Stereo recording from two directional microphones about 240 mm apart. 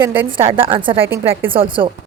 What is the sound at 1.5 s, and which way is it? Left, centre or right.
Speech, right.